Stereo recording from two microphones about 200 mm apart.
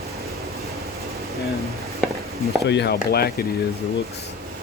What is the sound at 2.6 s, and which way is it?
Speech, 60° left (ahead or behind).